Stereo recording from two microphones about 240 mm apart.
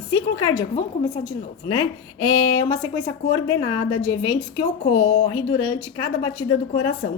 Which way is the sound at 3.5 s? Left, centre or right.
Centre.